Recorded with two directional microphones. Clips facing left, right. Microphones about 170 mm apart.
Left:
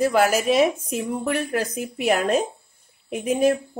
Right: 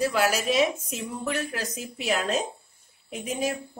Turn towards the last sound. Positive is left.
turn(degrees=55)  # may be behind; listen again after turning